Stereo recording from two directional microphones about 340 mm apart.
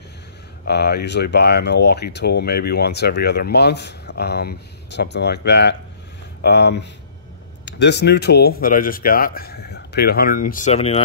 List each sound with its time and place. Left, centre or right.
0.7 s speech: left